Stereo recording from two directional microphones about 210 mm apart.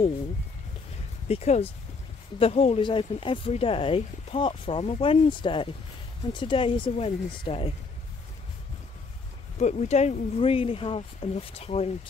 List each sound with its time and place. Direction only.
1.3 s speech: 30° left (ahead or behind)
9.6 s speech: 30° left (ahead or behind)